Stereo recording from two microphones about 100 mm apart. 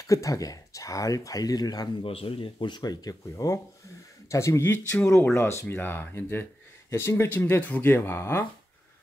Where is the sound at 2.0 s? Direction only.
70° left (ahead or behind).